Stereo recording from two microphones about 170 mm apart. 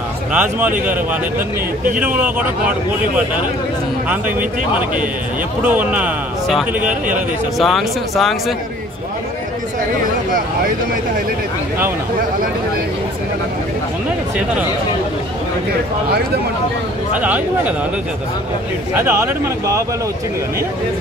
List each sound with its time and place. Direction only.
0.3 s speech: 10° right (ahead or behind)
2.1 s speech: 10° right (ahead or behind)
5.7 s speech: 10° right (ahead or behind)
6.8 s speech: 50° right (ahead or behind)
7.5 s speech: centre (ahead or behind)
17.1 s speech: 10° right (ahead or behind)
18.9 s speech: 15° right (ahead or behind)